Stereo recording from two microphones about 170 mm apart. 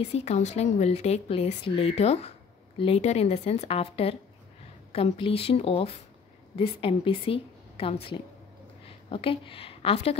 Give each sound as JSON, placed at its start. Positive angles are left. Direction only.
{"t": 0.1, "sound": "a woman's voice", "side_deg": 40}